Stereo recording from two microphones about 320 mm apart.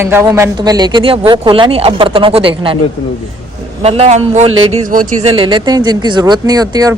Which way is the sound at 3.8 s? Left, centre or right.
Centre.